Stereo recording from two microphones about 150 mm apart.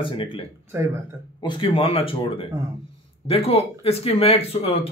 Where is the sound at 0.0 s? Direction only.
35° left (ahead or behind).